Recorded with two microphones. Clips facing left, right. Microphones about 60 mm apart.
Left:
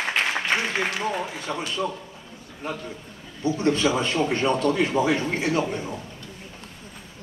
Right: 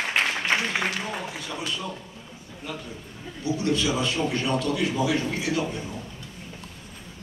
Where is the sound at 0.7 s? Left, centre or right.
Centre.